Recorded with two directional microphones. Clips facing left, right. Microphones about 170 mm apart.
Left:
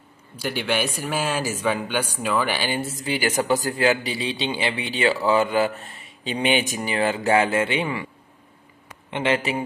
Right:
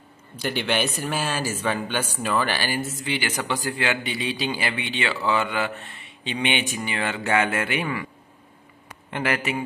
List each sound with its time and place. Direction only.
0.4 s a man's voice: 5° left (ahead or behind)
2.8 s a man's voice: 40° left (ahead or behind)
9.1 s a man's voice: 25° left (ahead or behind)